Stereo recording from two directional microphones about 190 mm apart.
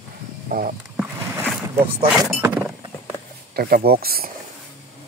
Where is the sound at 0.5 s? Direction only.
50° right (ahead or behind).